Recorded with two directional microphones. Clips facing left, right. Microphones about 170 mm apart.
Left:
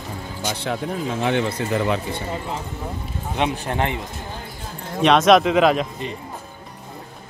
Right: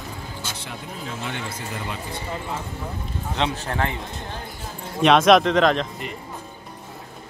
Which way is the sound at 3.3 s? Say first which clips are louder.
Left 3 dB; 15° left (ahead or behind).